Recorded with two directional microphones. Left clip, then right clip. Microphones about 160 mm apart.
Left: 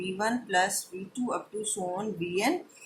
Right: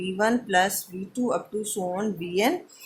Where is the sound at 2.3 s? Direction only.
50° right (ahead or behind).